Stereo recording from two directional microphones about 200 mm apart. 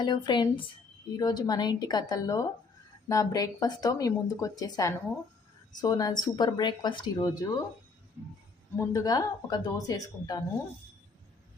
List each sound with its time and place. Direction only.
0.0 s speech: 25° left (ahead or behind)
8.7 s speech: 20° left (ahead or behind)